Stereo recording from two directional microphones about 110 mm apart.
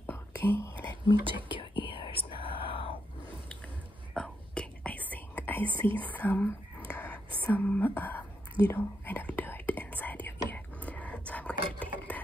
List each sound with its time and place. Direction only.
0.0 s whispering: 20° left (ahead or behind)
1.5 s whispering: 50° left (ahead or behind)
4.1 s whispering: 10° left (ahead or behind)
5.9 s speech: 15° left (ahead or behind)
6.9 s whispering: 15° left (ahead or behind)
7.4 s speech: 15° left (ahead or behind)
8.6 s whispering: 15° left (ahead or behind)